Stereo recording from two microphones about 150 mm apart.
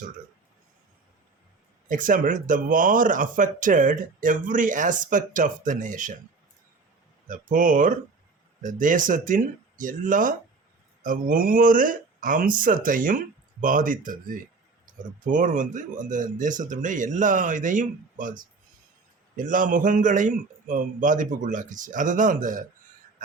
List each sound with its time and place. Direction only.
1.9 s speech: 65° right (ahead or behind)
7.3 s speech: 60° right (ahead or behind)